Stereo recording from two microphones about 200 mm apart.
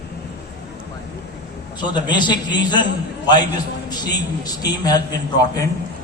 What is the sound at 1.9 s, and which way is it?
Speech, 20° left (ahead or behind).